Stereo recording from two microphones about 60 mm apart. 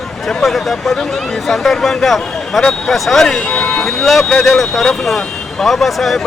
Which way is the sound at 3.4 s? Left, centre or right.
Left.